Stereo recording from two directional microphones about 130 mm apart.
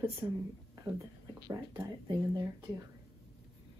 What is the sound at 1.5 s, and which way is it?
Speech, 20° right (ahead or behind).